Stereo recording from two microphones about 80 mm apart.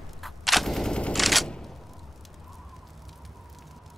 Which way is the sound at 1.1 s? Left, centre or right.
Centre.